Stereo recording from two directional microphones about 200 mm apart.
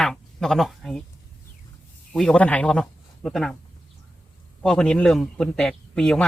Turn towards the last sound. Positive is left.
turn(degrees=5)  # may be behind; listen again after turning